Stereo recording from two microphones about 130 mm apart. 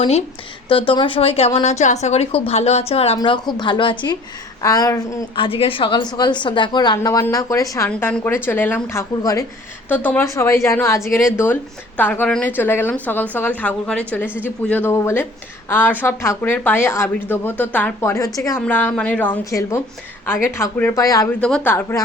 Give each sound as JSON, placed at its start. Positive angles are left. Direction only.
{"t": 0.7, "sound": "a woman's voice", "side_deg": 40}
{"t": 3.2, "sound": "a woman's voice", "side_deg": 35}
{"t": 4.6, "sound": "a woman's voice", "side_deg": 25}
{"t": 5.4, "sound": "a woman's voice", "side_deg": 45}
{"t": 7.9, "sound": "speech", "side_deg": 10}
{"t": 9.9, "sound": "a woman's voice", "side_deg": 15}
{"t": 18.6, "sound": "speech", "side_deg": 15}
{"t": 19.5, "sound": "a woman's voice", "side_deg": 25}
{"t": 21.4, "sound": "speech", "side_deg": 10}